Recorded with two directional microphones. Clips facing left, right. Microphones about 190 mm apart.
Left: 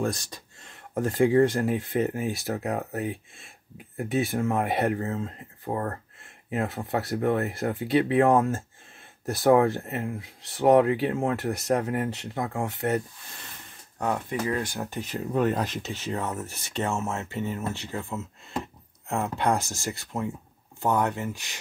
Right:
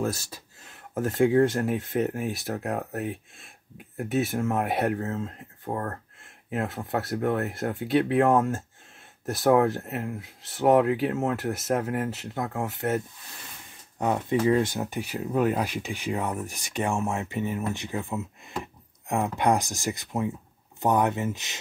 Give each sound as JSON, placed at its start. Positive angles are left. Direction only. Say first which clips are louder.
{"t": 0.0, "sound": "speech", "louder": "even", "side_deg": -5}
{"t": 13.9, "sound": "speech", "louder": "right 3 dB", "side_deg": -20}